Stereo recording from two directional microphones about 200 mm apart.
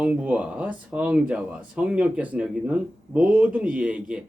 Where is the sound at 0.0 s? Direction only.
5° right (ahead or behind).